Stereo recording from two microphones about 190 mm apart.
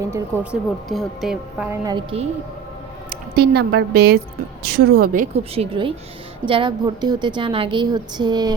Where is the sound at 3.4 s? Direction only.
55° right (ahead or behind).